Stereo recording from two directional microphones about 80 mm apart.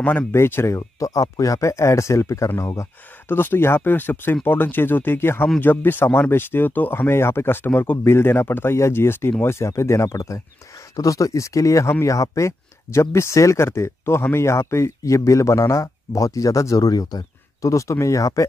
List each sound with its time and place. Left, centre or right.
0.3 s speech: left
0.7 s speech: left
3.3 s speech: left